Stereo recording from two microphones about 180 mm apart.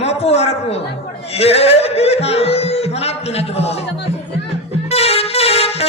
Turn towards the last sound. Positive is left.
turn(degrees=35)  # may be behind; listen again after turning